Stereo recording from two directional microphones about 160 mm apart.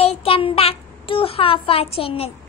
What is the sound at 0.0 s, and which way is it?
A child's voice, 40° left (ahead or behind).